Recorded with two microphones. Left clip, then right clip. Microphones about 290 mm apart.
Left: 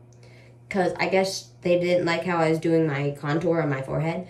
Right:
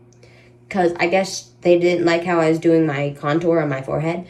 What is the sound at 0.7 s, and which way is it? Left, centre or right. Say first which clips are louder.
A woman's voice: right 5 dB; left.